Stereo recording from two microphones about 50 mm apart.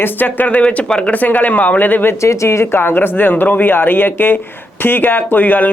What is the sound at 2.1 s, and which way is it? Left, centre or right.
Speech, left.